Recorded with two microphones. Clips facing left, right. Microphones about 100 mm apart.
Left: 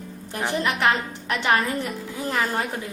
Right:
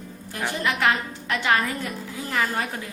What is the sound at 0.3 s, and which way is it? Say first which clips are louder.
A man's voice: left 1 dB; 20° left (ahead or behind).